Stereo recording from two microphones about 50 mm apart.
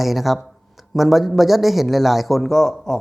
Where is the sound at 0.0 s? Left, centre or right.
Centre.